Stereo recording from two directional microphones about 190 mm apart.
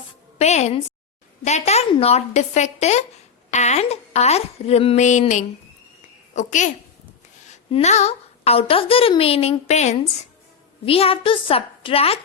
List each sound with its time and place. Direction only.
0.3 s a woman's voice: 35° left (ahead or behind)